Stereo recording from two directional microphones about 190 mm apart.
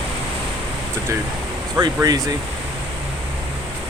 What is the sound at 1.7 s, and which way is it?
Speech, 20° right (ahead or behind).